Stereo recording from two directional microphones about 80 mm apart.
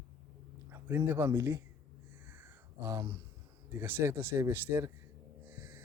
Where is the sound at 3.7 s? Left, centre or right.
Right.